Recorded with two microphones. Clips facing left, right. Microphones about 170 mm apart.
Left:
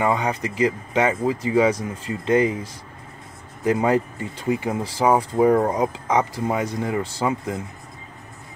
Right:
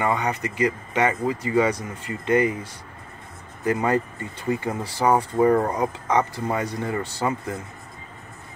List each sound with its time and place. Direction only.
0.0 s speech: 10° left (ahead or behind)
0.4 s speech: 90° left
0.9 s speech: 10° left (ahead or behind)
2.0 s speech: 90° left
3.6 s speech: 15° left (ahead or behind)